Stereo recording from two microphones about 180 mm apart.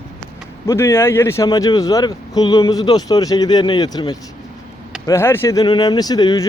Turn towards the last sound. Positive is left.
turn(degrees=20)  # may be behind; listen again after turning